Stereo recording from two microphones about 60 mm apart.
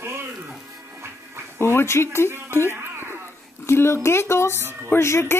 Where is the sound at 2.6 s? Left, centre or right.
Right.